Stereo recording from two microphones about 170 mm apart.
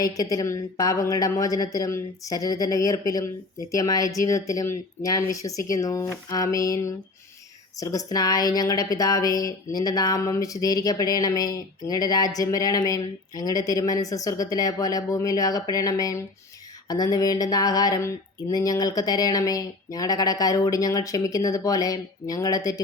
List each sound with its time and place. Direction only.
0.0 s a woman's voice: 20° left (ahead or behind)